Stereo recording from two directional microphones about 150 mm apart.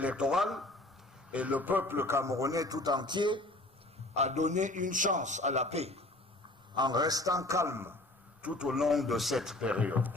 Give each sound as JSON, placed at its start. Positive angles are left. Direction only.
{"t": 0.0, "sound": "a man's voice", "side_deg": -5}
{"t": 4.1, "sound": "a man's voice", "side_deg": -50}
{"t": 6.7, "sound": "a man's voice", "side_deg": -30}